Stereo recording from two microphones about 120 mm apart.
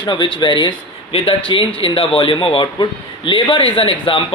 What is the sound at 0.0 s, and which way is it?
Speech, 40° left (ahead or behind).